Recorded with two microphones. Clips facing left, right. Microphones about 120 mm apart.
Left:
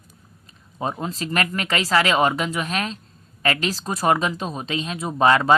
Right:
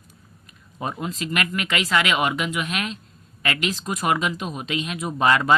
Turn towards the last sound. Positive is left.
turn(degrees=30)  # may be behind; listen again after turning